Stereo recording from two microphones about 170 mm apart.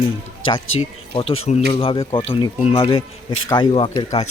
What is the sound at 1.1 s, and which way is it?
Speech, 35° left (ahead or behind).